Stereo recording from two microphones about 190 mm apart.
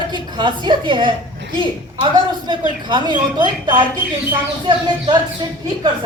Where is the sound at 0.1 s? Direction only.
25° right (ahead or behind).